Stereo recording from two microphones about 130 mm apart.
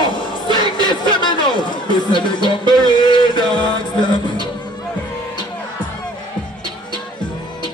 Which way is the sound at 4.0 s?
35° left (ahead or behind).